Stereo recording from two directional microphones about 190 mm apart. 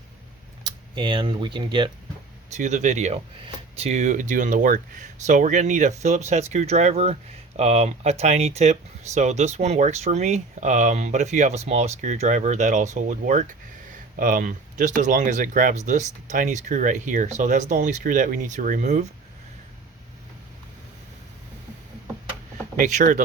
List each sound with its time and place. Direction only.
0.6 s speech: 25° right (ahead or behind)
2.5 s speech: 40° right (ahead or behind)
22.8 s speech: 40° right (ahead or behind)